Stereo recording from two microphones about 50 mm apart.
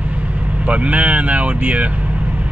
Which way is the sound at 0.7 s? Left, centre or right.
Right.